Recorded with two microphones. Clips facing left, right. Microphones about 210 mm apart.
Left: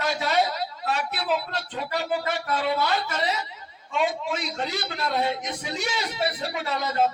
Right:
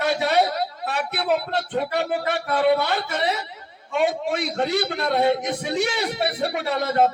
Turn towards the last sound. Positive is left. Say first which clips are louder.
# right 4 dB
turn(degrees=-60)  # may be behind; listen again after turning